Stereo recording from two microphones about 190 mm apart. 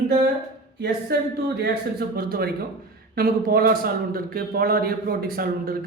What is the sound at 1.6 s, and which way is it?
A man's voice, 55° right (ahead or behind).